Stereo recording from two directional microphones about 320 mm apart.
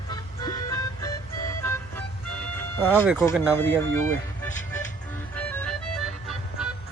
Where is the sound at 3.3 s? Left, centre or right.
Centre.